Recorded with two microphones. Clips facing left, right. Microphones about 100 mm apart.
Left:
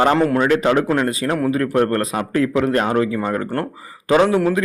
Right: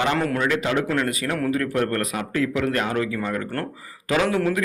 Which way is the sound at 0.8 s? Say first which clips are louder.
Left 5 dB; 30° left (ahead or behind).